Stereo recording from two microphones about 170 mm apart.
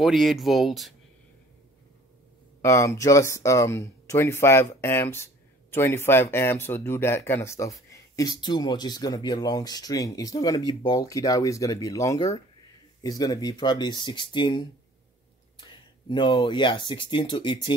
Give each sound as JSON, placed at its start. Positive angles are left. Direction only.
{"t": 0.0, "sound": "speech", "side_deg": 0}
{"t": 2.6, "sound": "speech", "side_deg": 20}
{"t": 16.1, "sound": "speech", "side_deg": 25}